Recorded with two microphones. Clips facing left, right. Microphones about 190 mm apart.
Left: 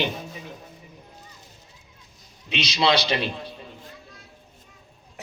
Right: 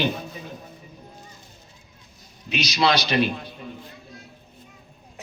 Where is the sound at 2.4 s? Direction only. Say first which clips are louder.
Right 1 dB; 25° left (ahead or behind).